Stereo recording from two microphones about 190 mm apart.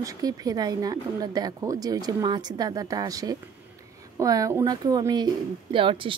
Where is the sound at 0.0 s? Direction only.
20° right (ahead or behind).